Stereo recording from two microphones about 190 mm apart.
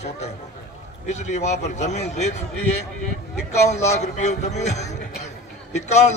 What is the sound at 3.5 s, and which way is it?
A man's voice, 35° left (ahead or behind).